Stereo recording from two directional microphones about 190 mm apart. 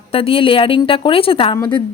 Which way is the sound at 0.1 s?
30° left (ahead or behind).